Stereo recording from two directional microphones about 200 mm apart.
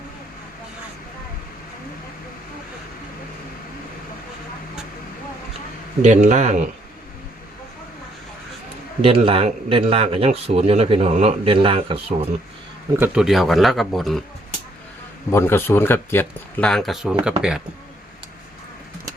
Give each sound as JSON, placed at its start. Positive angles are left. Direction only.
{"t": 6.0, "sound": "speech", "side_deg": -35}
{"t": 9.0, "sound": "a man's voice", "side_deg": -30}
{"t": 13.0, "sound": "speech", "side_deg": -5}
{"t": 15.3, "sound": "speech", "side_deg": 10}